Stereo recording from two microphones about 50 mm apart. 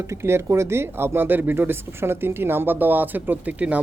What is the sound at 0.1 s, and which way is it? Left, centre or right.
Speech, right.